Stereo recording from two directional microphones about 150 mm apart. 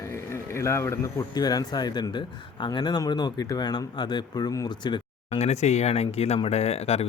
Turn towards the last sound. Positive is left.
turn(degrees=45)  # may be behind; listen again after turning